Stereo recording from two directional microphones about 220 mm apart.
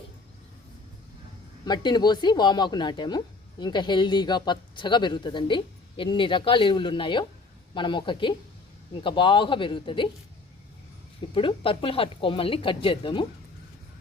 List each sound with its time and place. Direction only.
1.6 s speech: 20° left (ahead or behind)
11.3 s speech: 25° left (ahead or behind)